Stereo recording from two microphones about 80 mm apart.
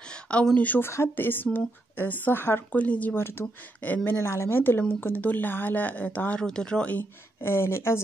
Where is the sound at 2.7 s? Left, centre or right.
Centre.